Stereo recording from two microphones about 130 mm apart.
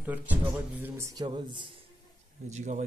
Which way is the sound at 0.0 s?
15° right (ahead or behind).